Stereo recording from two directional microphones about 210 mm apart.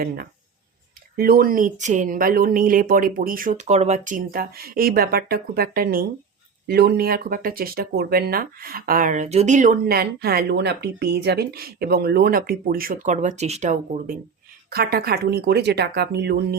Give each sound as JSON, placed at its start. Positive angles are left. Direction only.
{"t": 1.1, "sound": "speech", "side_deg": -45}
{"t": 9.8, "sound": "speech", "side_deg": -50}
{"t": 14.7, "sound": "speech", "side_deg": -50}